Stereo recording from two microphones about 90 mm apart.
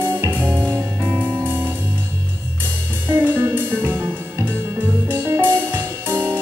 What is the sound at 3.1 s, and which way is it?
Music, 25° right (ahead or behind).